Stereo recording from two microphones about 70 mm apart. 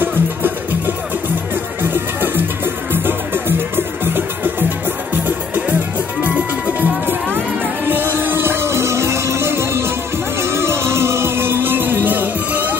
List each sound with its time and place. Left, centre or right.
0.0 s music: right